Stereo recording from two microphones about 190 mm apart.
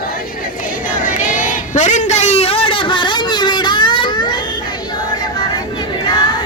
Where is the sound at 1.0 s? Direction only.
45° left (ahead or behind); by 4.3 s 25° left (ahead or behind).